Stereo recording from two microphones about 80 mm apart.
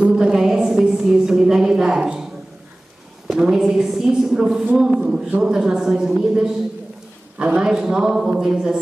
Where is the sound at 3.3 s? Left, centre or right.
Centre.